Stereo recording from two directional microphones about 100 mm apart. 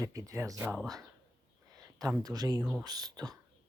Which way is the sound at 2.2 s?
40° right (ahead or behind).